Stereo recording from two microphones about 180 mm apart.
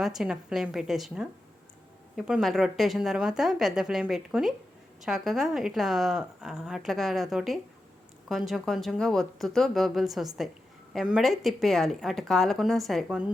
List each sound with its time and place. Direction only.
0.0 s a woman's voice: centre (ahead or behind)